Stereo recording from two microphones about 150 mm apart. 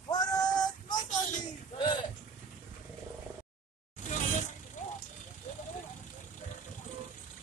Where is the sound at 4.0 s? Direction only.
50° left (ahead or behind).